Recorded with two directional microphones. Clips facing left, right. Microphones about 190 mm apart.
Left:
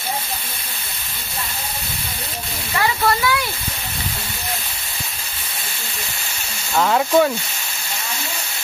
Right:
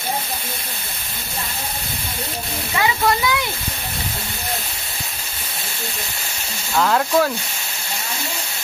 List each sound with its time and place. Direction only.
2.7 s speech: 15° right (ahead or behind)
6.8 s speech: 5° left (ahead or behind)